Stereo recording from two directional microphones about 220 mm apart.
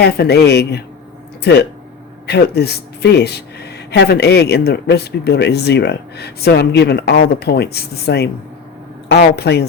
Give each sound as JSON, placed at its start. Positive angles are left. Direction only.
{"t": 0.0, "sound": "speech", "side_deg": 45}